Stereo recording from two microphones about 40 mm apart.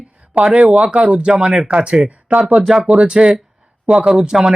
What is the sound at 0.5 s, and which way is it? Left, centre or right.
Speech, right.